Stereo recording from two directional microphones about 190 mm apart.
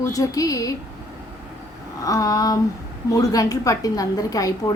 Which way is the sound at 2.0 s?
20° left (ahead or behind).